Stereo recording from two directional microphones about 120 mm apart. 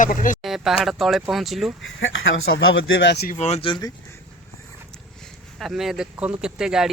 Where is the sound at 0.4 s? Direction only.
Centre (ahead or behind).